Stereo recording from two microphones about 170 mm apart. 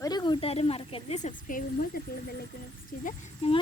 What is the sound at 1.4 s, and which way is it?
A woman's voice, 55° left (ahead or behind).